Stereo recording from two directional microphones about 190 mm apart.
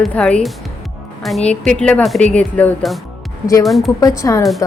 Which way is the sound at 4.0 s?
20° left (ahead or behind).